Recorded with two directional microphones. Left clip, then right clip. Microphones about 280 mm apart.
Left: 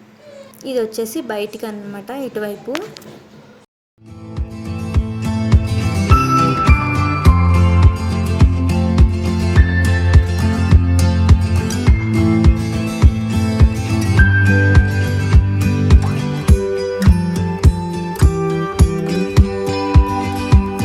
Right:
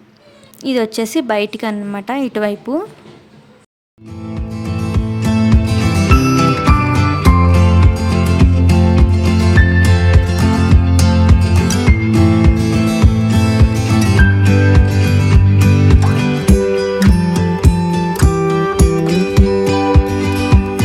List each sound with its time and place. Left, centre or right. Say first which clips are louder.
0.6 s a woman's voice: right 3 dB; right
4.6 s music: right 4 dB; centre